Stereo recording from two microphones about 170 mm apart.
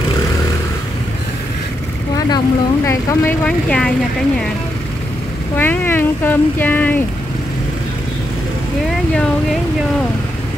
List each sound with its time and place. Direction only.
2.1 s speech: 25° left (ahead or behind); by 3.9 s 5° left (ahead or behind)
5.6 s speech: 10° left (ahead or behind)